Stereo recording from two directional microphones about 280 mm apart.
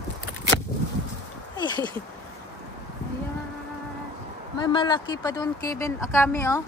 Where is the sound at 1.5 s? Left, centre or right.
Centre.